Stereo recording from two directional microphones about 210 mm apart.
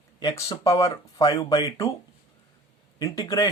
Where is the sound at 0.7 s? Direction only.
15° left (ahead or behind).